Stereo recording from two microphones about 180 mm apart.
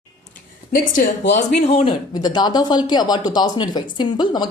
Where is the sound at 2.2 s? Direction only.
25° left (ahead or behind).